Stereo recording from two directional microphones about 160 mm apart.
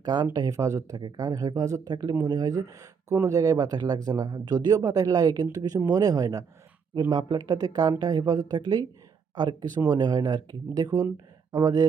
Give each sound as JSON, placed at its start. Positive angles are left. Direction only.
{"t": 0.0, "sound": "speech", "side_deg": -25}